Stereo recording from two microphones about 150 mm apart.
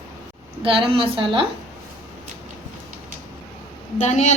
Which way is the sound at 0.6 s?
35° right (ahead or behind).